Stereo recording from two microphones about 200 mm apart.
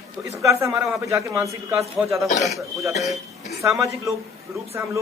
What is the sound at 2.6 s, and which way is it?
Speech, 15° right (ahead or behind).